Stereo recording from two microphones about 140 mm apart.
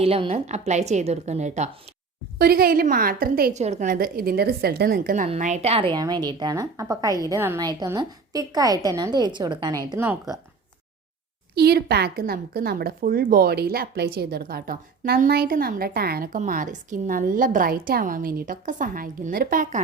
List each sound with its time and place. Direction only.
0.0 s a woman's voice: 45° right (ahead or behind)
2.4 s speech: 90° right
3.5 s a woman's voice: 55° right (ahead or behind)
3.8 s speech: 90° right
5.3 s a woman's voice: 55° right (ahead or behind)
5.9 s a woman's voice: 30° right (ahead or behind)
7.6 s a woman's voice: 30° right (ahead or behind)
11.7 s speech: 90° right